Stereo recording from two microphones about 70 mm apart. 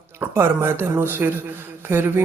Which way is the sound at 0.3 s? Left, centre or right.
Right.